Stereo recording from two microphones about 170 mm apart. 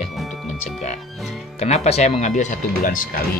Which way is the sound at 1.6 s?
40° left (ahead or behind).